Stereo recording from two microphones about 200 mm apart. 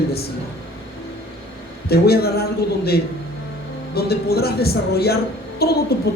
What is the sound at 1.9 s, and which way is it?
Speech, 50° left (ahead or behind).